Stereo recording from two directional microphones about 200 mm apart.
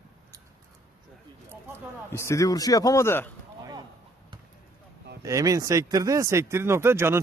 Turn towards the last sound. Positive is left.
turn(degrees=-10)  # may be behind; listen again after turning